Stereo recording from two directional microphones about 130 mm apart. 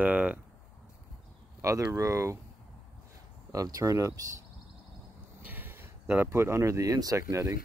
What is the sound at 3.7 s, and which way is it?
Speech, 25° right (ahead or behind).